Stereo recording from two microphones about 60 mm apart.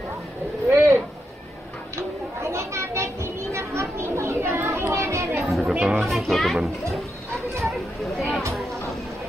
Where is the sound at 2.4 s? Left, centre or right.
Right.